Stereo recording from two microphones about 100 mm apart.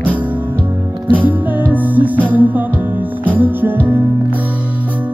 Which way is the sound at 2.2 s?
15° right (ahead or behind).